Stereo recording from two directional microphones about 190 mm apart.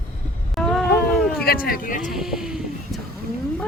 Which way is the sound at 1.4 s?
50° left (ahead or behind).